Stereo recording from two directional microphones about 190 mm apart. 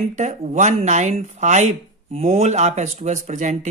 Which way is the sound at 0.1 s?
40° right (ahead or behind).